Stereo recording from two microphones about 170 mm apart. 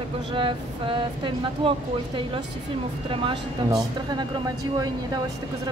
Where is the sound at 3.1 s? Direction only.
30° right (ahead or behind).